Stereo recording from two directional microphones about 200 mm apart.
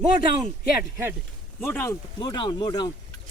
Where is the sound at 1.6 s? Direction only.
10° left (ahead or behind).